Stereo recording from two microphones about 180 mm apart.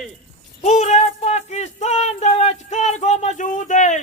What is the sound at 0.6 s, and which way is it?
Speech, 40° left (ahead or behind).